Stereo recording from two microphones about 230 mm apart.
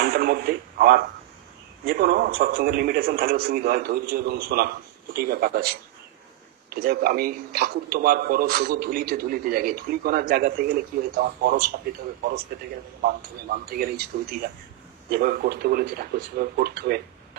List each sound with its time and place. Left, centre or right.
0.0 s a man's voice: right
15.1 s speech: right